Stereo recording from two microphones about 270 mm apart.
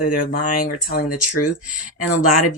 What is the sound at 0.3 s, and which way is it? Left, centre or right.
Speech, left.